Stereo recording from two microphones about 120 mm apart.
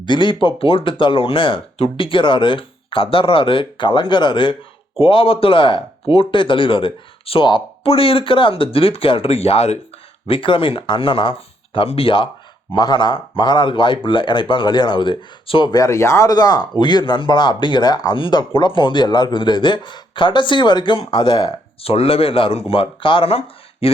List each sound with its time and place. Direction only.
0.0 s speech: 40° left (ahead or behind); by 9.7 s 60° left (ahead or behind)
10.2 s speech: 45° left (ahead or behind)
21.8 s speech: 55° left (ahead or behind)